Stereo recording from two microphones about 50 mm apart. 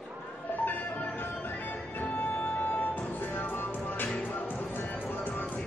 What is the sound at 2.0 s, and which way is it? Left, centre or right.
Music, left.